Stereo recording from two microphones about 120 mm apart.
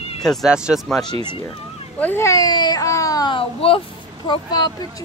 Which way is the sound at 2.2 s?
30° left (ahead or behind).